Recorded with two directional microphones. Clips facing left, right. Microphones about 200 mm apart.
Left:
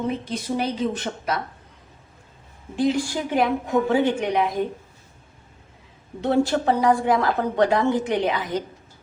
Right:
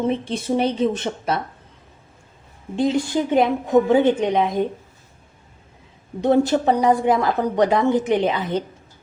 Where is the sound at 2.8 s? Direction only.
20° right (ahead or behind).